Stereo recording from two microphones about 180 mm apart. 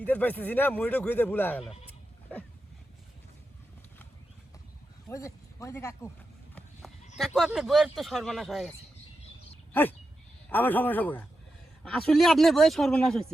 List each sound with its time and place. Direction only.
0.0 s speech: 10° left (ahead or behind)
5.0 s speech: 15° left (ahead or behind)
7.3 s speech: 5° right (ahead or behind)
10.5 s speech: 10° left (ahead or behind)